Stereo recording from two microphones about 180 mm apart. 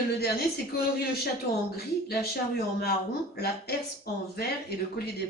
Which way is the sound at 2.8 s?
60° left (ahead or behind).